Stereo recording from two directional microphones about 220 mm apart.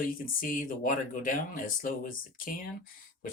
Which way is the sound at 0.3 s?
40° left (ahead or behind).